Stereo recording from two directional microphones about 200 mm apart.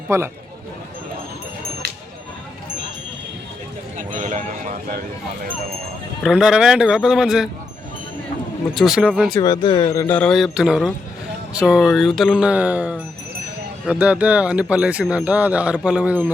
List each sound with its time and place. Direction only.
0.1 s a man's voice: 15° right (ahead or behind)
3.9 s a sound: 35° right (ahead or behind)
6.2 s speech: centre (ahead or behind)
8.7 s speech: centre (ahead or behind)
9.3 s speech: 20° left (ahead or behind); by 16.3 s 10° right (ahead or behind)